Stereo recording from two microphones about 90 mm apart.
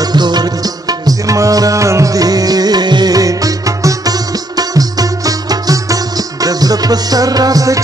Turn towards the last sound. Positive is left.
turn(degrees=-40)  # may be behind; listen again after turning